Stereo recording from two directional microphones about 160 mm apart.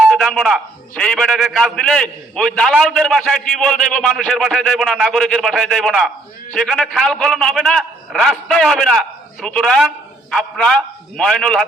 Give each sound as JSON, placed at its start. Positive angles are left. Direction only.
{"t": 0.0, "sound": "a man's voice", "side_deg": 0}